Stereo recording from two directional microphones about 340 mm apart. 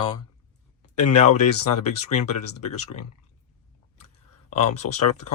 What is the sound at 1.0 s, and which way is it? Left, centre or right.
Speech, left.